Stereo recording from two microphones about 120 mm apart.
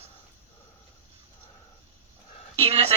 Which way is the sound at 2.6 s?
55° right (ahead or behind).